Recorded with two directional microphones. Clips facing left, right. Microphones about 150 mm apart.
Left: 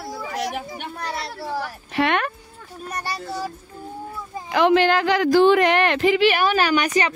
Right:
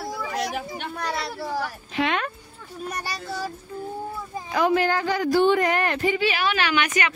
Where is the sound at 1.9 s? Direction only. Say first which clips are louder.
Left 4 dB; 60° left (ahead or behind).